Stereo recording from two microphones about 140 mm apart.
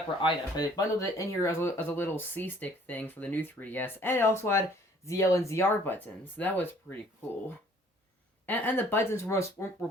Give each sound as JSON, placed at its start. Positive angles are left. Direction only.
{"t": 0.2, "sound": "speech", "side_deg": 30}
{"t": 8.4, "sound": "speech", "side_deg": 15}